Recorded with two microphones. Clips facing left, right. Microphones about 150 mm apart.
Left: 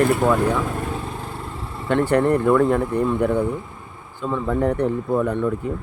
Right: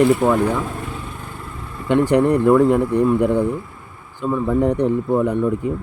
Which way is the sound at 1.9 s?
15° right (ahead or behind).